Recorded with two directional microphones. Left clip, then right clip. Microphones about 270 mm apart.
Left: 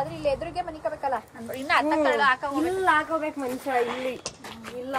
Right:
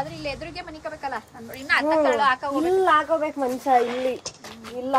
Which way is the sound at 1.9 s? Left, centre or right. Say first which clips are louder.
Right 4 dB; centre.